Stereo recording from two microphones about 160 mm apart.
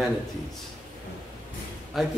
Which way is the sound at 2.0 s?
Centre (ahead or behind).